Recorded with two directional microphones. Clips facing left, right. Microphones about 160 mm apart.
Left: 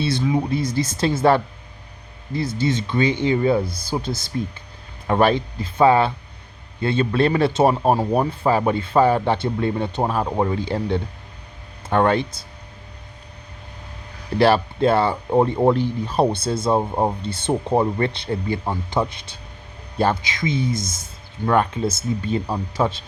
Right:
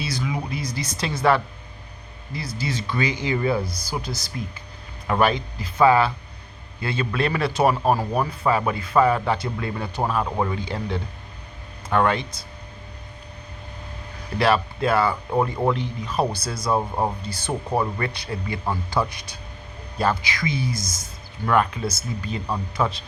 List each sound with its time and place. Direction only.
0.0 s speech: 30° left (ahead or behind)
14.3 s speech: 30° left (ahead or behind)